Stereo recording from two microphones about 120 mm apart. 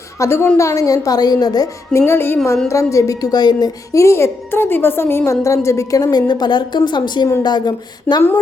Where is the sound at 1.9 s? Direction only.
20° left (ahead or behind).